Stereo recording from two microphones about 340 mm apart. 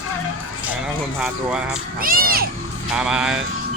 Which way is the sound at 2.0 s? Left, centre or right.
Right.